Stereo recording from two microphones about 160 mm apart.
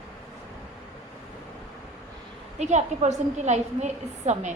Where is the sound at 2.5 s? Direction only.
45° right (ahead or behind).